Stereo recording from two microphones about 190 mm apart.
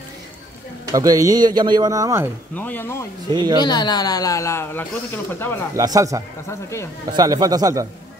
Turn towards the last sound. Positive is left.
turn(degrees=-20)  # may be behind; listen again after turning